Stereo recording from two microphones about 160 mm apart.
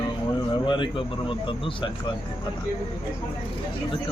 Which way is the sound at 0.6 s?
30° left (ahead or behind).